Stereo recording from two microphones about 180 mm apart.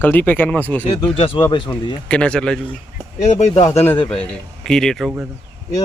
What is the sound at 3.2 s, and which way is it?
Speech, 40° left (ahead or behind).